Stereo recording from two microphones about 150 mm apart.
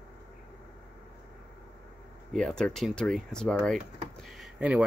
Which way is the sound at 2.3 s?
5° left (ahead or behind).